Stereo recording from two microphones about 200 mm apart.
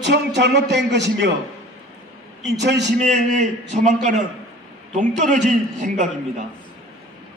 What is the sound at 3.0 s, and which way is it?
A man's voice, 35° right (ahead or behind).